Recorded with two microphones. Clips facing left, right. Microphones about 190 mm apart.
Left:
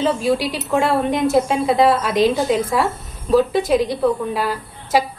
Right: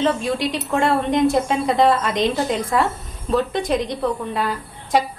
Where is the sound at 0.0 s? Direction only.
5° left (ahead or behind).